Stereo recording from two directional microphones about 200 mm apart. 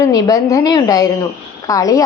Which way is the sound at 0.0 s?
15° left (ahead or behind).